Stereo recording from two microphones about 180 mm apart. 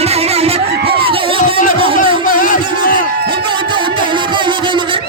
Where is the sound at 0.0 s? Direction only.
35° right (ahead or behind).